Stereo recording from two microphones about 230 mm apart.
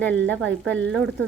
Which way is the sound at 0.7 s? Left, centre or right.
Right.